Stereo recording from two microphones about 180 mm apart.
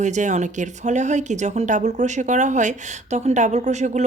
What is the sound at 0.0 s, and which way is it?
Speech, 40° right (ahead or behind).